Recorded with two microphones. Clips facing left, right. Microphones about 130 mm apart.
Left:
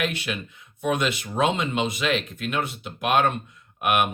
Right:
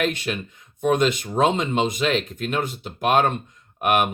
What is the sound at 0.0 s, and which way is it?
Speech, 35° right (ahead or behind).